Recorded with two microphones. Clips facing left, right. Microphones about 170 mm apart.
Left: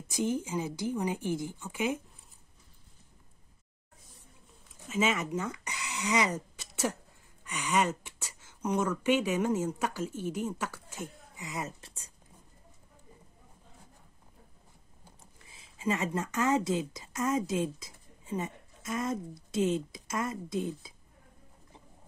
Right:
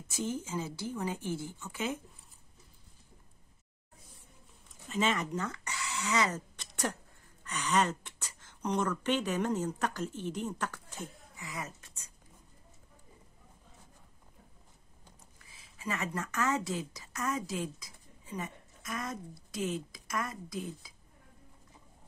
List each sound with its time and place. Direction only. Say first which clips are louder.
0.1 s speech: left 5 dB; 15° left (ahead or behind)
4.8 s speech: left 2 dB; 5° left (ahead or behind)
11.3 s speech: left 5 dB; 20° left (ahead or behind)
15.4 s speech: left 7 dB; 25° left (ahead or behind)